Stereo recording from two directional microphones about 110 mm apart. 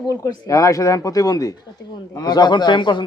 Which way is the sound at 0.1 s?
30° left (ahead or behind).